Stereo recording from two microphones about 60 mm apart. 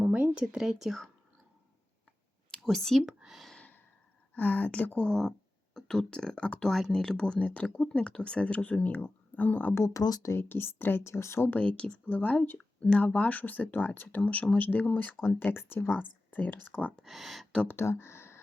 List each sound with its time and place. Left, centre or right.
0.0 s speech: right; by 1.0 s centre
2.6 s speech: centre
3.0 s speech: centre
4.4 s speech: left
5.0 s speech: centre; by 9.7 s left
9.7 s speech: left
10.3 s speech: left
11.5 s speech: left
16.0 s speech: left
17.0 s speech: centre
17.7 s speech: left